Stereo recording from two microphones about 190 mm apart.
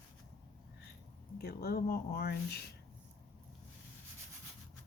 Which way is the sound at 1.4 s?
55° left (ahead or behind).